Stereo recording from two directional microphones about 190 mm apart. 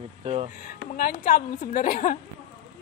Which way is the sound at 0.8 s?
50° left (ahead or behind).